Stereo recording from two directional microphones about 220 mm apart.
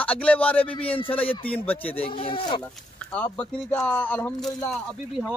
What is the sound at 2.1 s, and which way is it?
Speech, 20° left (ahead or behind).